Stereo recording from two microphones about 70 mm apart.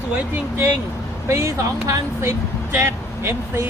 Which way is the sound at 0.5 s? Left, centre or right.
Right.